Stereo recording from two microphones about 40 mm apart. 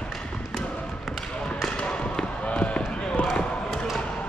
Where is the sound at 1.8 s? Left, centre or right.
Centre.